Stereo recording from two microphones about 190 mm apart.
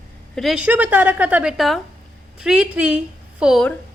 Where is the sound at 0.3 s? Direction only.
Centre (ahead or behind).